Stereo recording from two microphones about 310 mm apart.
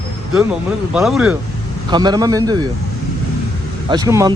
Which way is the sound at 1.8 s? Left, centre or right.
Centre.